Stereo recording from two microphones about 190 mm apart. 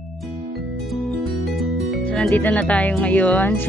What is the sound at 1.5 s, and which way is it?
Speech, centre (ahead or behind).